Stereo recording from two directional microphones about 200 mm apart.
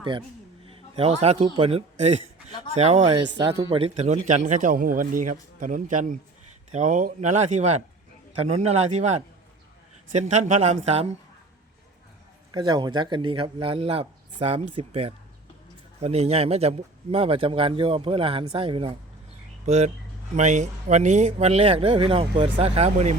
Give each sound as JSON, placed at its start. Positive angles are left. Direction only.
{"t": 0.6, "sound": "a man's voice", "side_deg": -30}
{"t": 12.5, "sound": "a man's voice", "side_deg": -20}